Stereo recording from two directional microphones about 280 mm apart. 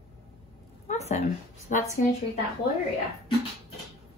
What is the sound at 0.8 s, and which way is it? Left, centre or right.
Speech, left.